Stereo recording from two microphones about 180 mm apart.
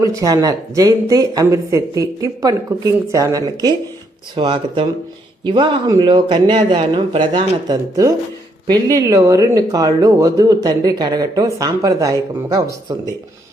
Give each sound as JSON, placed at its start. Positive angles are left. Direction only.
{"t": 0.0, "sound": "speech", "side_deg": -20}